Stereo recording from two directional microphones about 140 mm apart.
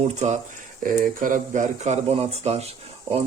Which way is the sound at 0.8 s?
85° right.